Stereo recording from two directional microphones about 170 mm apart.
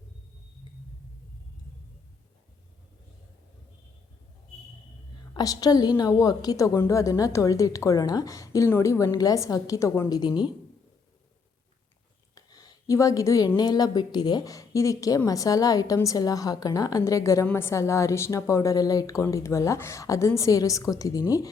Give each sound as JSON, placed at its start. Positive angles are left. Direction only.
{"t": 5.3, "sound": "a woman's voice", "side_deg": 20}
{"t": 12.3, "sound": "a woman's voice", "side_deg": 20}